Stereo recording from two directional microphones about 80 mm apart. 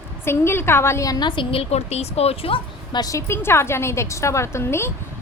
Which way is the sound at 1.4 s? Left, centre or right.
Left.